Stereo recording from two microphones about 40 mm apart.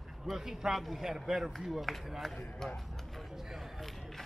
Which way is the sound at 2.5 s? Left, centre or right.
Centre.